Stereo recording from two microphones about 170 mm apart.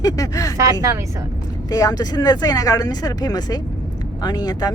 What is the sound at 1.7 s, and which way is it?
Speech, 20° left (ahead or behind).